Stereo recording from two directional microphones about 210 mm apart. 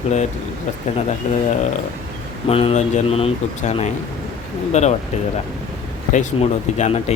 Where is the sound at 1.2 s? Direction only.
30° left (ahead or behind).